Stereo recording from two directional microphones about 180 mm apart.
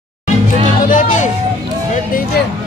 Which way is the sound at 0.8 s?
45° left (ahead or behind).